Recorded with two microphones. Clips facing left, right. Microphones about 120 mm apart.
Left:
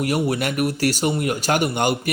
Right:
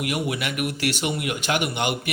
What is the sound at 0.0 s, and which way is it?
A man's voice, 40° left (ahead or behind).